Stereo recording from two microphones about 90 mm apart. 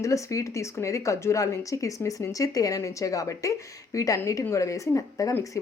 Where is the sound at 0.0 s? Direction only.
35° left (ahead or behind).